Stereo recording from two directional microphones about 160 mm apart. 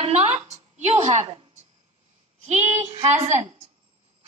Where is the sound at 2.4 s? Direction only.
40° right (ahead or behind).